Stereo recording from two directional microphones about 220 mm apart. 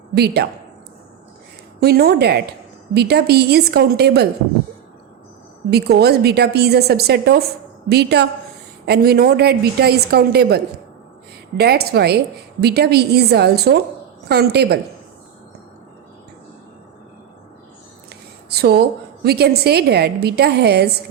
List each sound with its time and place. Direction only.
0.1 s a woman's voice: 45° right (ahead or behind)
1.8 s a woman's voice: 45° right (ahead or behind)
5.7 s a woman's voice: 45° right (ahead or behind)
18.4 s a woman's voice: 45° right (ahead or behind)